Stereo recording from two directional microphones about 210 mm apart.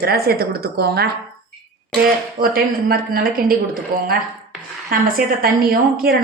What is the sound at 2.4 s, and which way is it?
A woman's voice, 45° right (ahead or behind).